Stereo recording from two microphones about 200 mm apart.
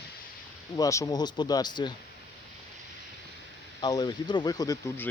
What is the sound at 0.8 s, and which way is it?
Speech, 15° left (ahead or behind).